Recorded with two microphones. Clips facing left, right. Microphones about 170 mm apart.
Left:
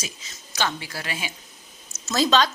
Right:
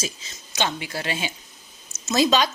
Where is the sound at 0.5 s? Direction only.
20° right (ahead or behind).